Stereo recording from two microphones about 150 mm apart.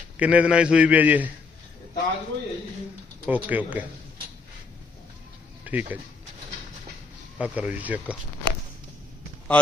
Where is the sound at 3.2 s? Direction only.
10° right (ahead or behind).